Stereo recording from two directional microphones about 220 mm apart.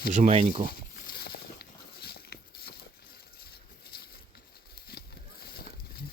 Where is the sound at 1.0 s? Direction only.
45° left (ahead or behind).